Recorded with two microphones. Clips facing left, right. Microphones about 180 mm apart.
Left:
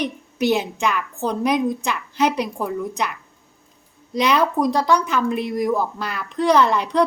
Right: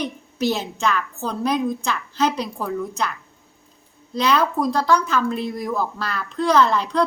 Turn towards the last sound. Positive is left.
turn(degrees=15)  # may be behind; listen again after turning